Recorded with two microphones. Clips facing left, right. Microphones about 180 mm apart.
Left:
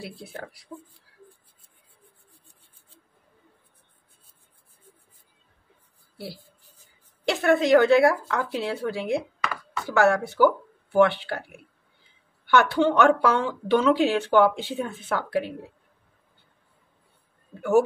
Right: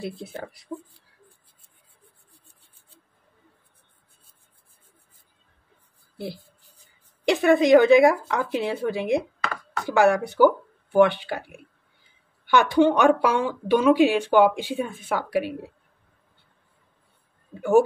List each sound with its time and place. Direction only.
0.0 s speech: 20° right (ahead or behind)
6.1 s speech: 20° right (ahead or behind)
17.6 s speech: 15° right (ahead or behind)